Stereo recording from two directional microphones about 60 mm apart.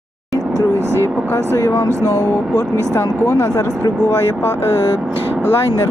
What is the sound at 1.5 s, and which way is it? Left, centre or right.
Speech, left.